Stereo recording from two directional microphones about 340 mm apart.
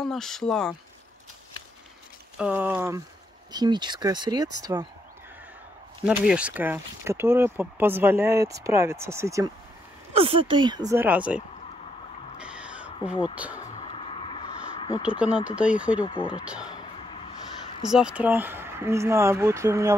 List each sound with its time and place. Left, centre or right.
0.0 s speech: centre
2.3 s speech: centre
6.0 s speech: centre
12.4 s crow: centre
13.6 s music: centre
15.0 s speech: centre
16.1 s speech: centre
16.4 s speech: centre
17.9 s speech: centre